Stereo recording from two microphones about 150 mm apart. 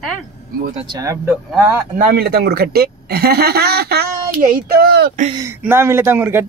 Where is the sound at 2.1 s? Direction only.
90° right.